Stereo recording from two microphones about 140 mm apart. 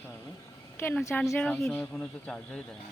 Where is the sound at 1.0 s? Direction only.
15° left (ahead or behind).